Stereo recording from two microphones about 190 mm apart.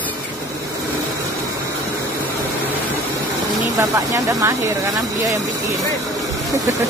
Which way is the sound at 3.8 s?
15° right (ahead or behind).